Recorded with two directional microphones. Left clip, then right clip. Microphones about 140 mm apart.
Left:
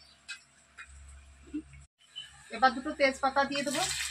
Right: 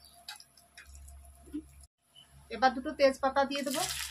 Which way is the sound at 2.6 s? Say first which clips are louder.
Even; 40° right (ahead or behind).